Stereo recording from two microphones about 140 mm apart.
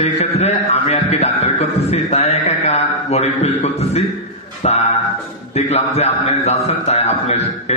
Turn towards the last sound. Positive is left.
turn(degrees=50)  # may be behind; listen again after turning